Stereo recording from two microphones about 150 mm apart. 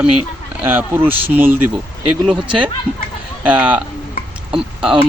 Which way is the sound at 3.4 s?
10° right (ahead or behind).